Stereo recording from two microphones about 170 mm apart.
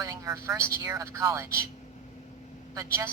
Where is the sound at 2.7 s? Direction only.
20° right (ahead or behind).